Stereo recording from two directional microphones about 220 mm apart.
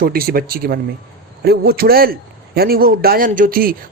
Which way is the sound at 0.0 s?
40° right (ahead or behind).